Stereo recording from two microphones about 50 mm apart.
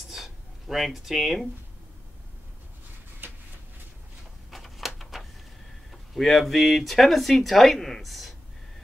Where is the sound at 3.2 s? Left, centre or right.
Right.